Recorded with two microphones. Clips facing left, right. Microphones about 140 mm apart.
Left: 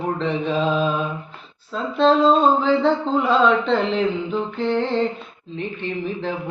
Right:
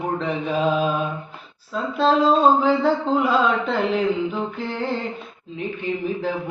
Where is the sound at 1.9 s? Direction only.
5° right (ahead or behind).